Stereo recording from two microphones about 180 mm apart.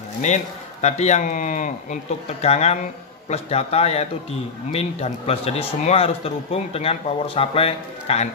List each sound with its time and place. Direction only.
0.2 s speech: 40° left (ahead or behind)